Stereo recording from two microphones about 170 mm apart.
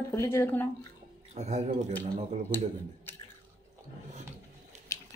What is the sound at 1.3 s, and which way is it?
Speech, 40° right (ahead or behind).